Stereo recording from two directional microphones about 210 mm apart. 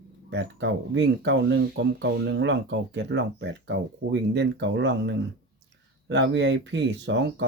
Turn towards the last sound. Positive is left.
turn(degrees=-55)  # may be behind; listen again after turning